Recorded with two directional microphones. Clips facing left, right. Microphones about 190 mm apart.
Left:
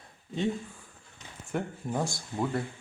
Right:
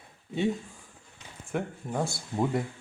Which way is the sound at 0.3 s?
10° right (ahead or behind).